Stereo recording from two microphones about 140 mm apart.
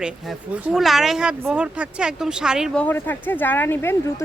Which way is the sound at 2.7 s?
10° left (ahead or behind).